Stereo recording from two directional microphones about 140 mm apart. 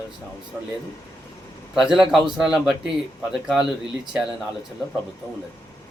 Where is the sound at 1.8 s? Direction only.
5° right (ahead or behind).